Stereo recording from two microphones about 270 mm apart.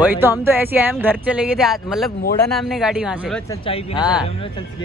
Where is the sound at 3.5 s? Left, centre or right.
Centre.